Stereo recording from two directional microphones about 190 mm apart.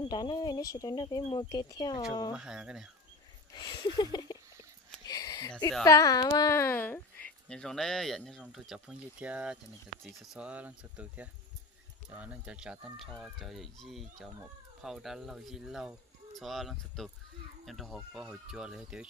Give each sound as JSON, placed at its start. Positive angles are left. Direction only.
{"t": 0.0, "sound": "speech", "side_deg": 20}
{"t": 2.3, "sound": "speech", "side_deg": -5}
{"t": 3.5, "sound": "a sound", "side_deg": 25}
{"t": 5.9, "sound": "speech", "side_deg": 15}